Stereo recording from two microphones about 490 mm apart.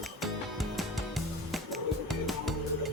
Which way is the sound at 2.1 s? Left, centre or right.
Centre.